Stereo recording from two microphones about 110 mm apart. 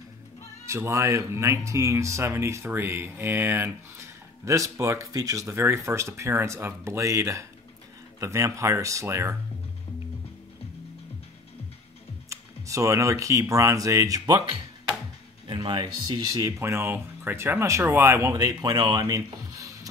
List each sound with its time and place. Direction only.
0.7 s speech: 25° right (ahead or behind)
12.3 s speech: 30° right (ahead or behind)
15.4 s music: 45° right (ahead or behind)
16.3 s speech: 30° right (ahead or behind)